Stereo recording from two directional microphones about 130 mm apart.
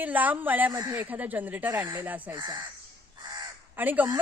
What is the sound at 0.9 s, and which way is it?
A woman's voice, 10° right (ahead or behind).